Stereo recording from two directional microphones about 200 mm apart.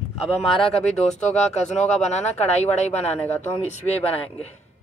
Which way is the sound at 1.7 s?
35° left (ahead or behind).